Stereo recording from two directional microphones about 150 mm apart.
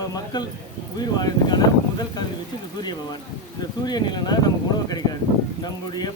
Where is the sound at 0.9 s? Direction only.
25° left (ahead or behind).